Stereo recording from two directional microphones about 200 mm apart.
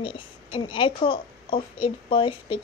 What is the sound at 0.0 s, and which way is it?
A woman's voice, 25° left (ahead or behind).